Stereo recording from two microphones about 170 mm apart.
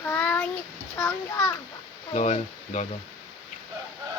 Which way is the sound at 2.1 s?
45° left (ahead or behind).